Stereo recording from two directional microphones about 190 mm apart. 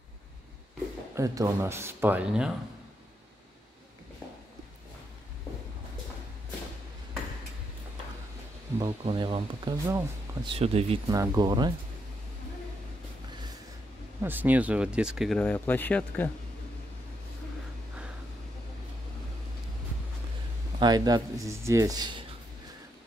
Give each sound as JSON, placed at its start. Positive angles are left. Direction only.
{"t": 1.1, "sound": "speech", "side_deg": -15}
{"t": 8.7, "sound": "speech", "side_deg": -30}
{"t": 10.5, "sound": "speech", "side_deg": -30}
{"t": 11.1, "sound": "speech", "side_deg": -20}
{"t": 14.2, "sound": "speech", "side_deg": -10}
{"t": 20.8, "sound": "speech", "side_deg": -20}